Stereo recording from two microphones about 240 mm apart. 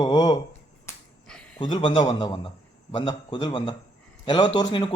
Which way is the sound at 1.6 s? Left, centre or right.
Centre.